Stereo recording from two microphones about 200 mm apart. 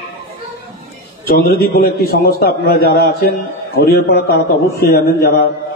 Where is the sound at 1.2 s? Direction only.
50° left (ahead or behind).